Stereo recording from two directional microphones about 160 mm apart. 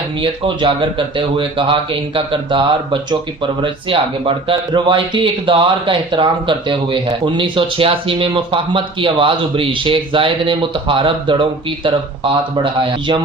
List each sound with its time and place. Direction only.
0.2 s speech: 30° right (ahead or behind)